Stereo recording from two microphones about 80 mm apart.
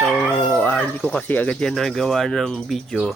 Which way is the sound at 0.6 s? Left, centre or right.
Centre.